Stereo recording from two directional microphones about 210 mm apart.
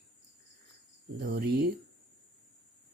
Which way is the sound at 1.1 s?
45° right (ahead or behind).